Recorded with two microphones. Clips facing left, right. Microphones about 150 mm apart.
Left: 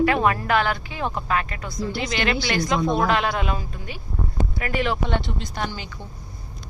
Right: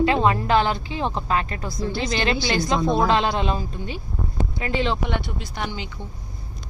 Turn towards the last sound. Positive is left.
turn(degrees=-15)  # may be behind; listen again after turning